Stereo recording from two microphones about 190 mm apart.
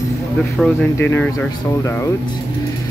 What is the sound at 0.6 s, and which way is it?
Speech, 10° left (ahead or behind).